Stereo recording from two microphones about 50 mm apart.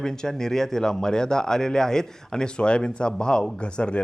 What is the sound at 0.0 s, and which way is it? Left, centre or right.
Speech, centre.